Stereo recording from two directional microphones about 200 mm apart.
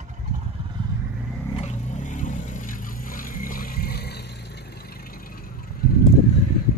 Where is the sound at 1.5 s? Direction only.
35° left (ahead or behind).